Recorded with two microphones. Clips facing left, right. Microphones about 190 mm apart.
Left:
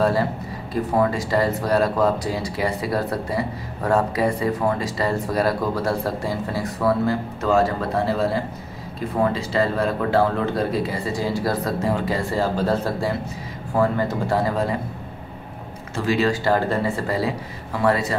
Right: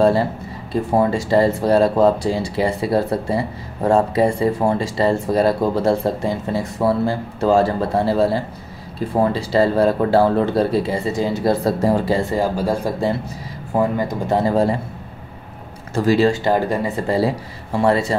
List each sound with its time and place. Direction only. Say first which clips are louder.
0.7 s speech: right 3 dB; 25° right (ahead or behind)
11.8 s speech: right 5 dB; 35° right (ahead or behind)
12.2 s speech: right 3 dB; 15° right (ahead or behind)
15.9 s speech: right 6 dB; 40° right (ahead or behind)
16.3 s speech: right 3 dB; 15° right (ahead or behind)